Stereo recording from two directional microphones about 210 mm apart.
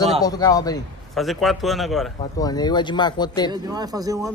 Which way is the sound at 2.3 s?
20° left (ahead or behind).